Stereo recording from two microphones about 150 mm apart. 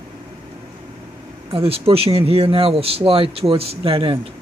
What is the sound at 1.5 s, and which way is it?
Speech, 40° right (ahead or behind).